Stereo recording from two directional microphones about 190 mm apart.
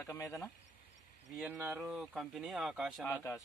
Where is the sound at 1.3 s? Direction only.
Centre (ahead or behind).